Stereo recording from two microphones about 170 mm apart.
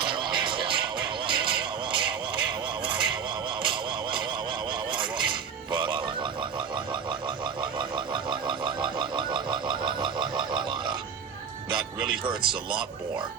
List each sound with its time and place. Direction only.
0.2 s music: 30° right (ahead or behind)
4.9 s a sound: 30° right (ahead or behind)
5.7 s frog: 30° right (ahead or behind)
7.6 s frog: 30° right (ahead or behind)
11.7 s music: 30° right (ahead or behind)